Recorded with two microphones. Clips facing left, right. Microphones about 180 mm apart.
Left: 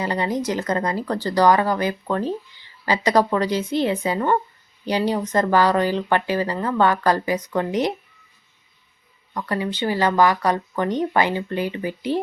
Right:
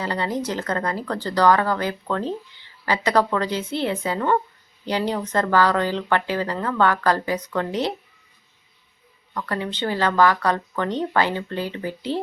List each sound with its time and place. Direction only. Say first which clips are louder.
0.0 s speech: left 2 dB; 15° left (ahead or behind)
9.3 s speech: left 2 dB; 15° left (ahead or behind)